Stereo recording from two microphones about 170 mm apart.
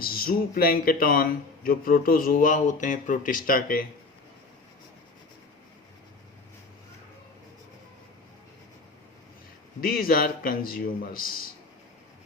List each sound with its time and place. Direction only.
0.0 s a man's voice: 60° left (ahead or behind)
9.8 s a man's voice: 60° left (ahead or behind)